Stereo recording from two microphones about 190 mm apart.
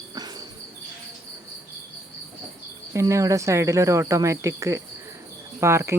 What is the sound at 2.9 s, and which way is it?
Cricket, 15° right (ahead or behind).